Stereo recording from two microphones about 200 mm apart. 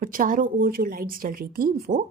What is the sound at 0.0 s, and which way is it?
A woman's voice, 45° right (ahead or behind).